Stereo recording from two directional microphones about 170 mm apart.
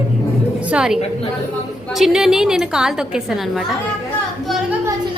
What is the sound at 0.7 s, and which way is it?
Speech, 5° right (ahead or behind).